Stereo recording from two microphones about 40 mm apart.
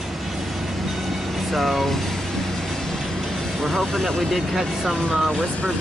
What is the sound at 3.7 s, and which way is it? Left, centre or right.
Speech, centre.